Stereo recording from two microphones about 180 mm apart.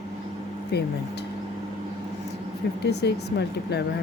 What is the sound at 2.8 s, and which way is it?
Speech, 70° left (ahead or behind).